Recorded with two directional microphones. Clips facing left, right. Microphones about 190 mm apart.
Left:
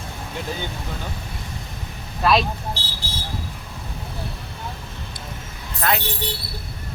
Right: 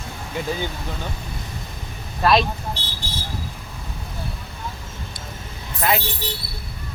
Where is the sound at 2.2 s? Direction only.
Centre (ahead or behind).